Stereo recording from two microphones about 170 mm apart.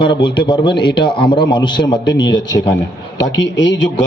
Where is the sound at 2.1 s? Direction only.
90° left.